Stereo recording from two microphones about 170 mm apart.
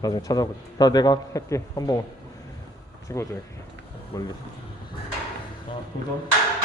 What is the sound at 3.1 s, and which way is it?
A man's voice, 20° left (ahead or behind).